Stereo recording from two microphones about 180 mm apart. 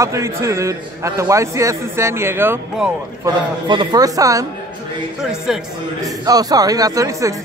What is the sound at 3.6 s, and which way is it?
Speech, 25° right (ahead or behind).